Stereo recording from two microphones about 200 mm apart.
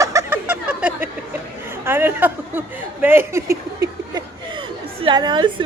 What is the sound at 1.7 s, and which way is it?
Speech, 10° right (ahead or behind).